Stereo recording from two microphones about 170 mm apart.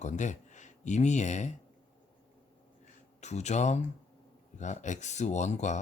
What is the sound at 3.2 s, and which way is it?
Speech, 40° left (ahead or behind).